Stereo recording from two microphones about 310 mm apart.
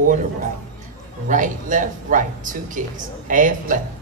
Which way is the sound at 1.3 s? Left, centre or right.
Right.